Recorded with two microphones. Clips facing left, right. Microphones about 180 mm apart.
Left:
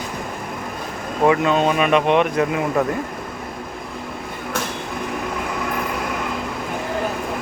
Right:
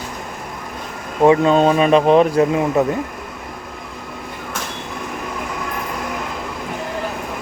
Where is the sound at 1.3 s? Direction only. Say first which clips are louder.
Right 5 dB; 35° right (ahead or behind).